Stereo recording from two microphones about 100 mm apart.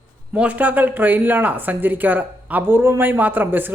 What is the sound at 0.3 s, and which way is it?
A man's voice, 15° right (ahead or behind).